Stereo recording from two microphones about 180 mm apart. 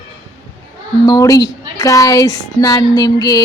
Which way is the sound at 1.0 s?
20° left (ahead or behind).